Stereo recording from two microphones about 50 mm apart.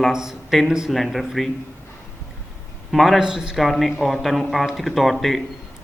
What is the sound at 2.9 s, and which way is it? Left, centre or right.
Speech, centre.